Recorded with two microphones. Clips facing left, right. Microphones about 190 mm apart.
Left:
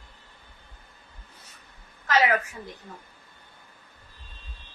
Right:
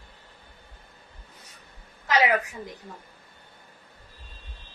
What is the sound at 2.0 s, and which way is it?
Speech, 15° right (ahead or behind).